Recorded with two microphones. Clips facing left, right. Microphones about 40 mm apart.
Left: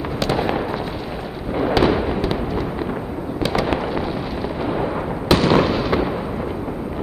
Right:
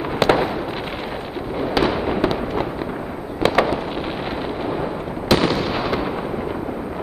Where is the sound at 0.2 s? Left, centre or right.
Right.